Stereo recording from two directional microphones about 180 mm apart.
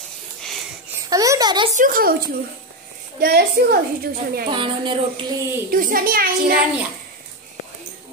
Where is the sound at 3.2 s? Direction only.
60° right (ahead or behind).